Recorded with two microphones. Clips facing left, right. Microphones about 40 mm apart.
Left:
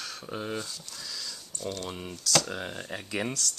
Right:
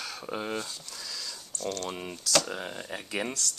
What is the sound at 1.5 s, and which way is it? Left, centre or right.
Speech, centre.